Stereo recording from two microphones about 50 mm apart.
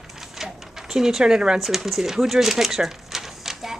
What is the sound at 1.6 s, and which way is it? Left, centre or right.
A woman's voice, centre.